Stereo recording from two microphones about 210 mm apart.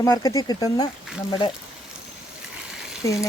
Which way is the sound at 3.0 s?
15° left (ahead or behind).